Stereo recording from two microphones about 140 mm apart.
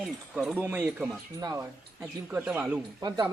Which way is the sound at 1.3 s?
25° right (ahead or behind).